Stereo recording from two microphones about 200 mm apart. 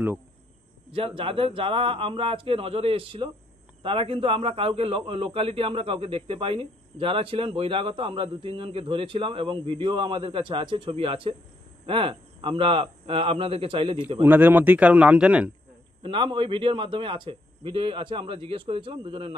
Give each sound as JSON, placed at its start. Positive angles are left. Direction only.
{"t": 0.9, "sound": "a man's voice", "side_deg": -25}
{"t": 14.2, "sound": "a man's voice", "side_deg": -10}
{"t": 16.0, "sound": "a man's voice", "side_deg": -25}